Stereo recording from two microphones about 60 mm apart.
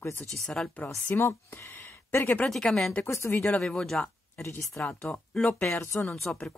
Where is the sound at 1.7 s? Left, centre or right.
Left.